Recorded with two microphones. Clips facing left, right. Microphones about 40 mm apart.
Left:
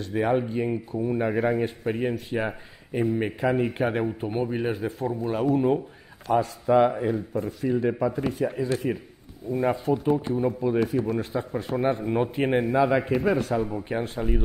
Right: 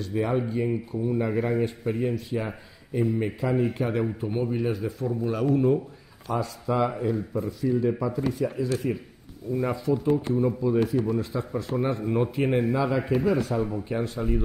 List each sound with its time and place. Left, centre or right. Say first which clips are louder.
0.0 s a man's voice: left 2 dB; left
4.0 s a man's voice: left 1 dB; left
10.7 s a man's voice: even; left